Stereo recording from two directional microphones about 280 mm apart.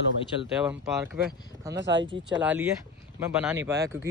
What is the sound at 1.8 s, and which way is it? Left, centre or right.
Speech, right.